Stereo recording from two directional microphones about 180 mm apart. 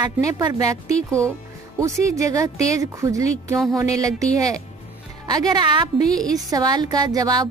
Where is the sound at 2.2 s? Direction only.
20° right (ahead or behind).